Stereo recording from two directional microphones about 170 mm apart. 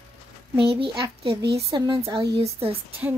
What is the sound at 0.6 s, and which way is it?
Speech, 30° right (ahead or behind).